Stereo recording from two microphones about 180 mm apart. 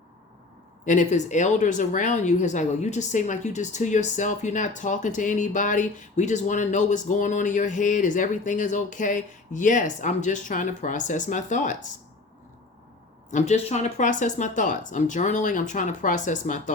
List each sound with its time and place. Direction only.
0.9 s a woman's voice: 45° left (ahead or behind)
13.3 s a woman's voice: 40° left (ahead or behind)